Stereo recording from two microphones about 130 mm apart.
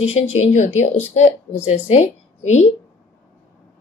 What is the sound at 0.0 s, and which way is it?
A woman's voice, 55° left (ahead or behind).